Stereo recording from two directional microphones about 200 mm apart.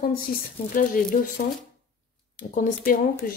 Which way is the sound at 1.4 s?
45° left (ahead or behind).